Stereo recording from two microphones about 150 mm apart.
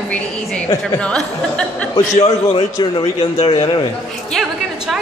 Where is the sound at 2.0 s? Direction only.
45° left (ahead or behind).